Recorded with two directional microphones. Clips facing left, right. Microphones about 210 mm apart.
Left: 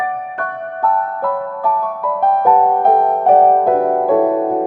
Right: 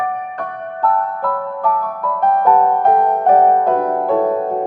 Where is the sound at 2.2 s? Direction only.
5° left (ahead or behind).